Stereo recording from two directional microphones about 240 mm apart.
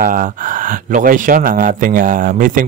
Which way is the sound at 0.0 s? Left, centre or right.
Right.